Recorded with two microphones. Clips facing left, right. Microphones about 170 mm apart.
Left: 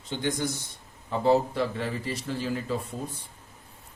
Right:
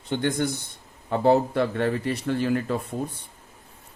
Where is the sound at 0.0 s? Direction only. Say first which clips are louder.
Right 4 dB; 60° right (ahead or behind).